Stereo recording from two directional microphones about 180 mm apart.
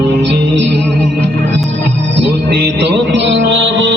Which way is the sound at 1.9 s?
75° right (ahead or behind).